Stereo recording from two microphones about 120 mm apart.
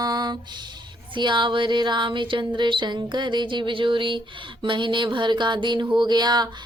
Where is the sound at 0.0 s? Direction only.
35° right (ahead or behind).